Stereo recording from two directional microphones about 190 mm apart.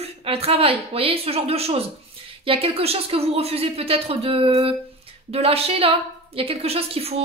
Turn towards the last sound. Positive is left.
turn(degrees=-30)  # may be behind; listen again after turning